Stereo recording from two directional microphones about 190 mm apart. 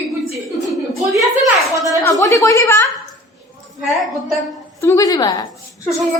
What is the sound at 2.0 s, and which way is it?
Speech, 15° left (ahead or behind).